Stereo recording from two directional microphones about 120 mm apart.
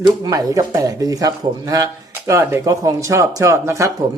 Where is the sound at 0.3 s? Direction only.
30° right (ahead or behind).